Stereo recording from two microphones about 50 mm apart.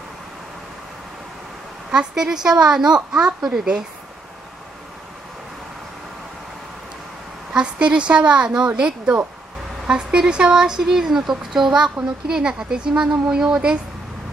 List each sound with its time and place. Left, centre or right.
1.9 s speech: centre
7.5 s speech: right